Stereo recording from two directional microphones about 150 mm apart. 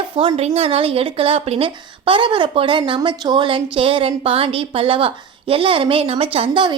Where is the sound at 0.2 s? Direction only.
40° right (ahead or behind).